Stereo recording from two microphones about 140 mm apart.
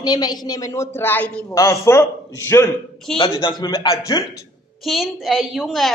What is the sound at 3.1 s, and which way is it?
Speech, 5° left (ahead or behind).